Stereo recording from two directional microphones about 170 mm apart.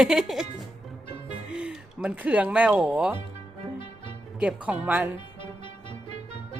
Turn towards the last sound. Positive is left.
turn(degrees=-40)  # may be behind; listen again after turning